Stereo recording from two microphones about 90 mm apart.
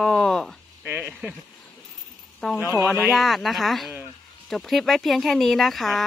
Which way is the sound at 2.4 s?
5° left (ahead or behind).